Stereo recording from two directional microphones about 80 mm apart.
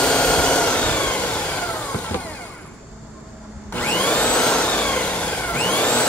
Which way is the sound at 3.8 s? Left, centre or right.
Centre.